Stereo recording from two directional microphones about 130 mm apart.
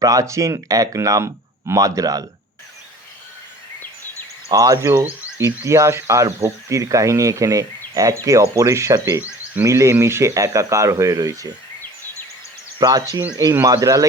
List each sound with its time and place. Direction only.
0.0 s speech: 25° right (ahead or behind)
4.5 s speech: 25° right (ahead or behind)
12.8 s speech: 30° right (ahead or behind)